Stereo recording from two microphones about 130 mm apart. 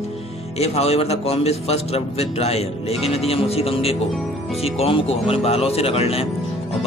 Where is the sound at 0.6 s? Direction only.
55° left (ahead or behind).